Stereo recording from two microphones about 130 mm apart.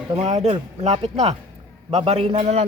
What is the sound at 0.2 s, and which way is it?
A man's voice, 55° right (ahead or behind).